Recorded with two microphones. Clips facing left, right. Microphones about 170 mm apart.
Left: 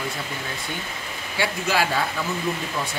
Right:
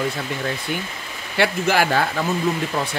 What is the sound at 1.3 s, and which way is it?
Speech, 65° right (ahead or behind).